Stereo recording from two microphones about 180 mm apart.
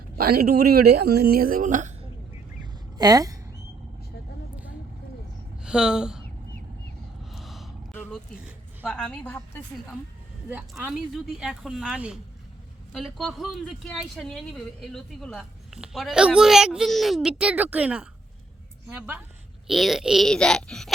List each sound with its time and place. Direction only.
0.3 s a woman's voice: 55° right (ahead or behind)
3.0 s speech: 20° right (ahead or behind)
5.6 s speech: 5° right (ahead or behind)
7.3 s gasp: centre (ahead or behind)
8.8 s a woman's voice: 5° left (ahead or behind)
10.5 s a woman's voice: 5° right (ahead or behind)